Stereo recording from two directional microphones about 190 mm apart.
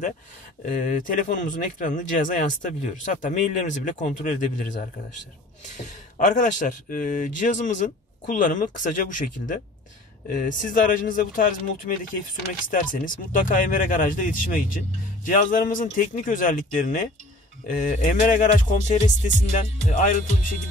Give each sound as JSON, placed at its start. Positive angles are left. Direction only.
{"t": 0.7, "sound": "speech", "side_deg": 40}